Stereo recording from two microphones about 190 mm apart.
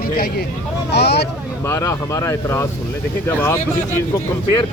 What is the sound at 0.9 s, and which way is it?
Speech, 60° left (ahead or behind).